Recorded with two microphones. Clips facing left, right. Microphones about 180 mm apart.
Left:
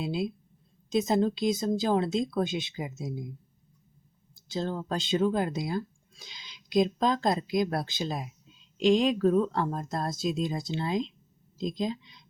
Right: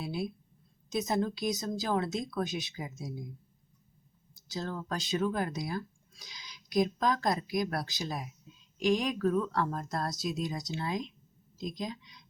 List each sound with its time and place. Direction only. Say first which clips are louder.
0.0 s a sound: left 5 dB; 25° left (ahead or behind)
0.9 s speech: left 6 dB; 25° left (ahead or behind)
4.4 s speech: left 5 dB; 25° left (ahead or behind)